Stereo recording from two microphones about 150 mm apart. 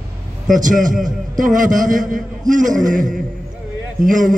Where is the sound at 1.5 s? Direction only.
60° right (ahead or behind).